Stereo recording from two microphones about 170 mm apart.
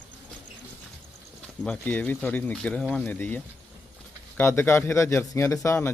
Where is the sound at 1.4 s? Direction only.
5° left (ahead or behind).